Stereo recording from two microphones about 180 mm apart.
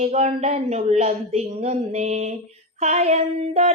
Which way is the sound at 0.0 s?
40° right (ahead or behind).